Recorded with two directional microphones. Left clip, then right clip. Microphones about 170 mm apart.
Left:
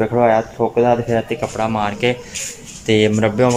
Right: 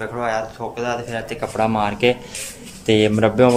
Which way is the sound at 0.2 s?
35° left (ahead or behind).